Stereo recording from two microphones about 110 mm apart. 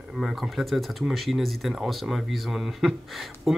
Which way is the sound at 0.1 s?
Centre (ahead or behind).